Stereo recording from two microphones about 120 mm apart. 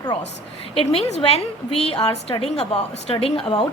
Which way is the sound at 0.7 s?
55° left (ahead or behind).